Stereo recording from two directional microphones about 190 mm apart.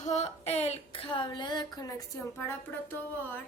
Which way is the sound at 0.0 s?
35° left (ahead or behind).